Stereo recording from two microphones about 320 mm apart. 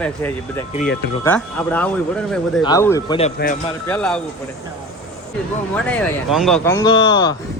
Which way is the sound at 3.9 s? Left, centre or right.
Centre.